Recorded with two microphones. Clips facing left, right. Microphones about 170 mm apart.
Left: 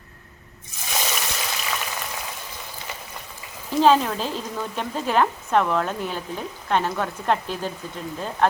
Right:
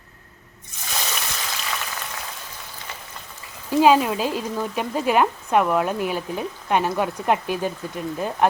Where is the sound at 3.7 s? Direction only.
10° right (ahead or behind).